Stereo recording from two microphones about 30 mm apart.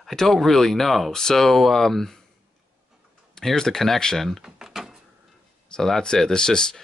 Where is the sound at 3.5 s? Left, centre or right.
Centre.